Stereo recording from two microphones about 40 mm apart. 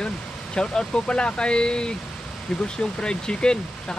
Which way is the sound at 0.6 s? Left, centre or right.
Left.